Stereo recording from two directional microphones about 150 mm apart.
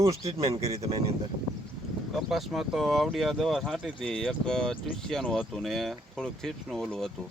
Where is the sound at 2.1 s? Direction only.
Centre (ahead or behind).